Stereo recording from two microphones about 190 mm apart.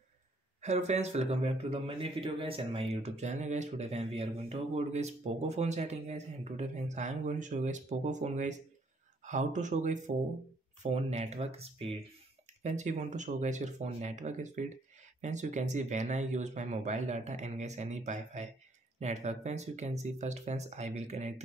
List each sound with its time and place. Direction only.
0.6 s a man's voice: 35° right (ahead or behind)